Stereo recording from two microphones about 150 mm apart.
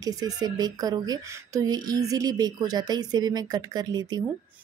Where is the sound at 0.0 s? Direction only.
25° right (ahead or behind).